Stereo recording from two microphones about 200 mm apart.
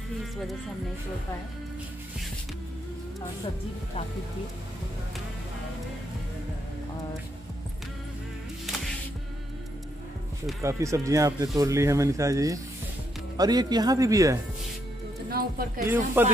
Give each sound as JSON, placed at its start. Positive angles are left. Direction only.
{"t": 10.6, "sound": "speech", "side_deg": -15}
{"t": 15.2, "sound": "speech", "side_deg": -50}
{"t": 15.8, "sound": "speech", "side_deg": -10}